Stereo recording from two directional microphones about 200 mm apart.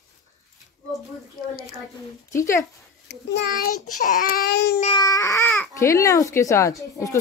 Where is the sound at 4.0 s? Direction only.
40° left (ahead or behind); by 4.7 s 55° left (ahead or behind).